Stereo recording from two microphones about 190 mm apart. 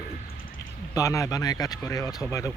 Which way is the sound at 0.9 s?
15° left (ahead or behind).